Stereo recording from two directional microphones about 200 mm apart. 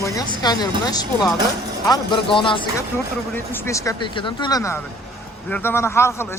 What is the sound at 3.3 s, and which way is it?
Speech, 15° left (ahead or behind).